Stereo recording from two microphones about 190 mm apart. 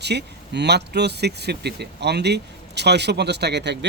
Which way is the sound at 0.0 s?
60° right (ahead or behind).